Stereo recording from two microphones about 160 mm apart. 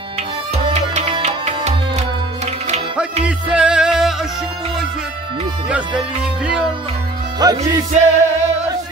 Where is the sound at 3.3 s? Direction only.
5° right (ahead or behind).